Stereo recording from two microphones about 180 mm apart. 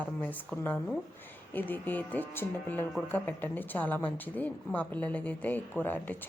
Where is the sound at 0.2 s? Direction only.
10° left (ahead or behind).